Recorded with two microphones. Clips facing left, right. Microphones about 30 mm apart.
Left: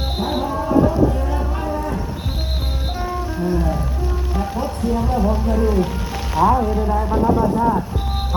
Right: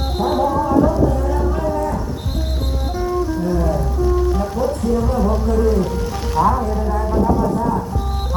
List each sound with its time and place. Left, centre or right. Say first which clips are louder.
0.5 s music: left 2 dB; centre
0.9 s music: right 1 dB; centre
3.0 s music: right 6 dB; left
3.4 s music: right 2 dB; centre